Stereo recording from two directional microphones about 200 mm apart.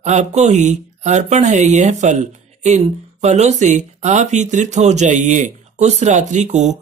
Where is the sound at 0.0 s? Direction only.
35° right (ahead or behind).